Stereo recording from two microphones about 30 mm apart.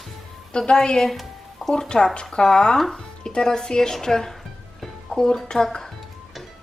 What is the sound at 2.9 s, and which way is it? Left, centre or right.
Music, left.